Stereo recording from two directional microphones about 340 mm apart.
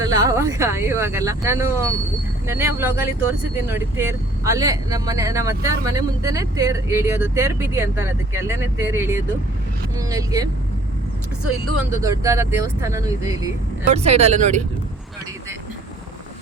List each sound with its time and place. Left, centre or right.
0.0 s speech: centre
11.9 s speech: centre